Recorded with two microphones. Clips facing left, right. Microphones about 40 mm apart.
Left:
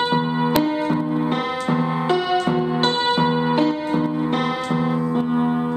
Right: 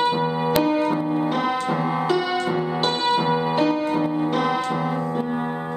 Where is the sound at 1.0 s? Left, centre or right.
Centre.